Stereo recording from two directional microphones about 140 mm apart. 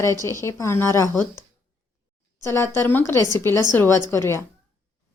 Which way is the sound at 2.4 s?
20° left (ahead or behind).